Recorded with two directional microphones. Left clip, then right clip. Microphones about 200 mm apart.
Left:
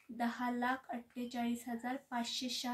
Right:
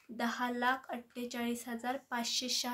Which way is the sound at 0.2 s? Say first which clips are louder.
Right 3 dB; 40° right (ahead or behind).